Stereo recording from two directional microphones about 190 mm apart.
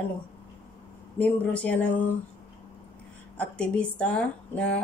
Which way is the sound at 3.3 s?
5° left (ahead or behind).